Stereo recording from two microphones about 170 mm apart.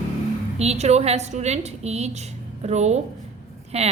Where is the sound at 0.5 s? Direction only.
40° right (ahead or behind).